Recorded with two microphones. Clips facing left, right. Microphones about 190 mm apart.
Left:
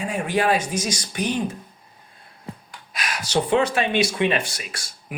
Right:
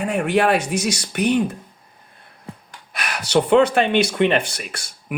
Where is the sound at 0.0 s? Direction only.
65° right (ahead or behind).